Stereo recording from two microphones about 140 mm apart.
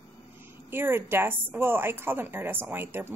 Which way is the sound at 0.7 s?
15° right (ahead or behind).